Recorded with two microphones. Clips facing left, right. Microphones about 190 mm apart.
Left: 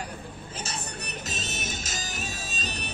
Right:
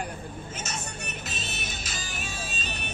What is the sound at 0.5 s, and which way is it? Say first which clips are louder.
Music: left 3 dB; 35° left (ahead or behind).